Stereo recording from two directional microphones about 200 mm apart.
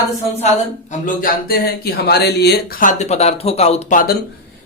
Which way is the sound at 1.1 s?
45° left (ahead or behind).